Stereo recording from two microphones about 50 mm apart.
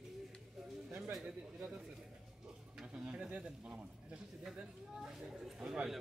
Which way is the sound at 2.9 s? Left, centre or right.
Right.